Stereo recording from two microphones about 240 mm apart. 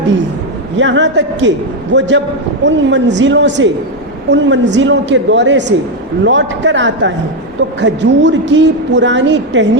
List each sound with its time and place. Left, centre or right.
0.8 s a woman's voice: right